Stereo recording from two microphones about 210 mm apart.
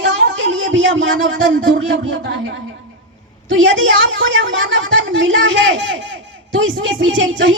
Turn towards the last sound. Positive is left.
turn(degrees=-65)  # may be behind; listen again after turning